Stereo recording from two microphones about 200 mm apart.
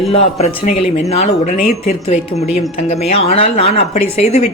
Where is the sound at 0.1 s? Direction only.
30° left (ahead or behind).